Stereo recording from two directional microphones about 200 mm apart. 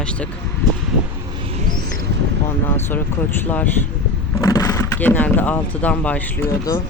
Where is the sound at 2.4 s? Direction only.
10° left (ahead or behind).